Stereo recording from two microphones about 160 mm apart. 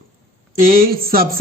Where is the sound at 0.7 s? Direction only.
65° right (ahead or behind).